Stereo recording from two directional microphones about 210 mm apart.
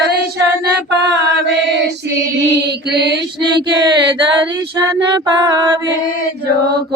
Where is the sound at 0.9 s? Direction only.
55° right (ahead or behind).